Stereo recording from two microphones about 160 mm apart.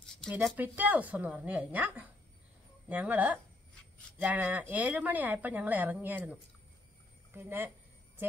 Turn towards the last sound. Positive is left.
turn(degrees=-10)  # may be behind; listen again after turning